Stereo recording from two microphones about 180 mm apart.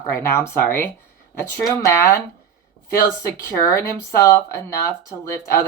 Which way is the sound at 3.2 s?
15° left (ahead or behind).